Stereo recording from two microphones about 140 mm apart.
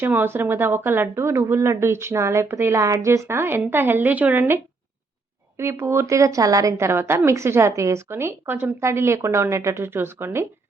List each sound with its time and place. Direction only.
0.0 s a woman's voice: 15° right (ahead or behind)